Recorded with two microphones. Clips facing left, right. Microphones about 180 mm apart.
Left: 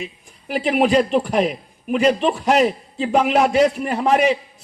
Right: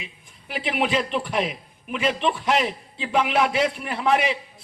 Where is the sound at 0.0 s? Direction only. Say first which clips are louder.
Left 10 dB; 45° left (ahead or behind).